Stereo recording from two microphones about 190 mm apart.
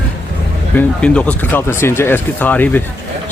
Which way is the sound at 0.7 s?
5° left (ahead or behind).